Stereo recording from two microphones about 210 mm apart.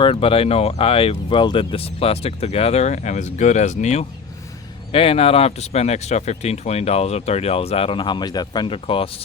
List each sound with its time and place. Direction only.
0.0 s speech: 25° left (ahead or behind)